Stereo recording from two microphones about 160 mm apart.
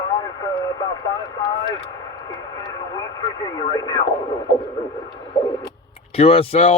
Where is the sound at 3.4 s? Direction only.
25° left (ahead or behind).